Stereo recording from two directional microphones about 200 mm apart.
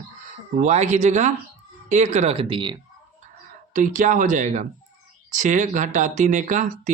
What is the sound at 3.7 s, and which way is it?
Speech, 40° right (ahead or behind).